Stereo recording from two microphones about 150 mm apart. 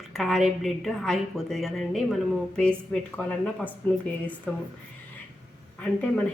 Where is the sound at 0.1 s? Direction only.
Centre (ahead or behind).